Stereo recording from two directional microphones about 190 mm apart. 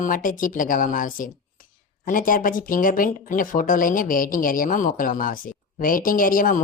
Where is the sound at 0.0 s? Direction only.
45° left (ahead or behind).